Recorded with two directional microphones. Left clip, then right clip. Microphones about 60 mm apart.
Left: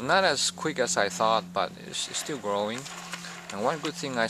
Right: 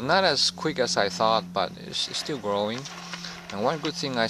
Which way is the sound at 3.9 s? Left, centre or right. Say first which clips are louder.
Right 2 dB; right.